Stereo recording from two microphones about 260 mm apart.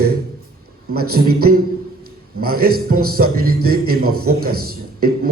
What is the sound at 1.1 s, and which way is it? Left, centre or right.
A man's voice, right.